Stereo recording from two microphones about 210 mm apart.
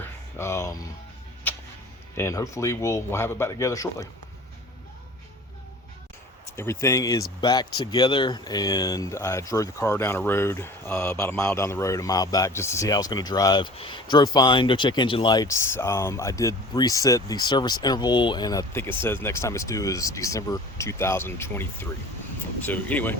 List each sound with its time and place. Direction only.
0.0 s a sound: 10° left (ahead or behind)
1.5 s music: 10° left (ahead or behind)
2.1 s speech: 15° left (ahead or behind)
6.6 s speech: 10° left (ahead or behind)